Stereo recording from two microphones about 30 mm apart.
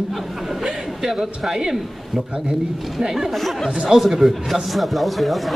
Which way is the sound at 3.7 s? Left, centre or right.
Right.